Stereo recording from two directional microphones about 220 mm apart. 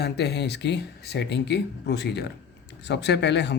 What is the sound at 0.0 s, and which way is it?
Speech, 50° left (ahead or behind).